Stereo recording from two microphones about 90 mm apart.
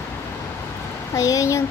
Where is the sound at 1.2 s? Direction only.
40° left (ahead or behind).